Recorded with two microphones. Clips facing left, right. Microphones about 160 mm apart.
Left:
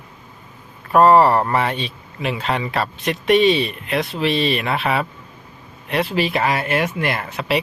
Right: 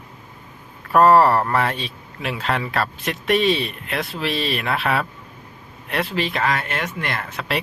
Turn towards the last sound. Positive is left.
turn(degrees=5)  # may be behind; listen again after turning